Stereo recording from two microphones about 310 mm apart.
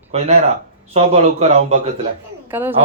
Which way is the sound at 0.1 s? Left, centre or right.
Centre.